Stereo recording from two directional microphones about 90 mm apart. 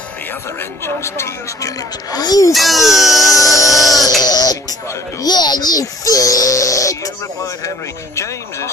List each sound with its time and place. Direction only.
0.6 s a child's voice: 30° left (ahead or behind); by 2.5 s 45° left (ahead or behind)
2.5 s speech: centre (ahead or behind)
3.3 s music: 40° left (ahead or behind)
4.2 s a sound: 45° left (ahead or behind)
5.2 s a child's voice: 50° left (ahead or behind); by 8.6 s 35° left (ahead or behind)